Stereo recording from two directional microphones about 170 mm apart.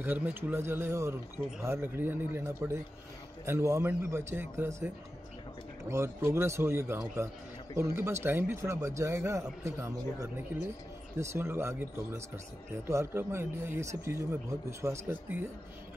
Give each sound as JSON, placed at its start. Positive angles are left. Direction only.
{"t": 0.0, "sound": "speech", "side_deg": -10}